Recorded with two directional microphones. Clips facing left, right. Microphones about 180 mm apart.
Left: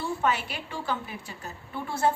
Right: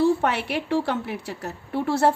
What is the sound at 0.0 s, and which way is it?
A woman's voice, 65° right (ahead or behind).